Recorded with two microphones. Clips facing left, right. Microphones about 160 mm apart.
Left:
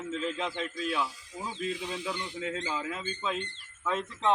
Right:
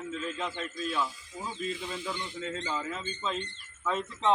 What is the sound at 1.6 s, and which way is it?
Speech, 70° left (ahead or behind).